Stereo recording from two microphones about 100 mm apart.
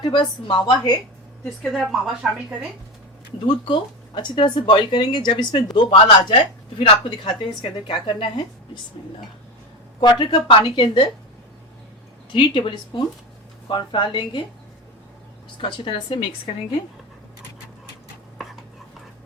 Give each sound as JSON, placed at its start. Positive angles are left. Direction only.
{"t": 0.0, "sound": "speech", "side_deg": 50}
{"t": 1.5, "sound": "a woman's voice", "side_deg": 0}
{"t": 3.4, "sound": "speech", "side_deg": 50}
{"t": 10.0, "sound": "speech", "side_deg": 55}
{"t": 12.3, "sound": "speech", "side_deg": 55}
{"t": 15.6, "sound": "speech", "side_deg": 60}